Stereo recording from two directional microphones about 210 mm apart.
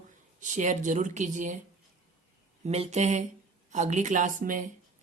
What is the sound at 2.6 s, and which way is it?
Speech, 30° right (ahead or behind).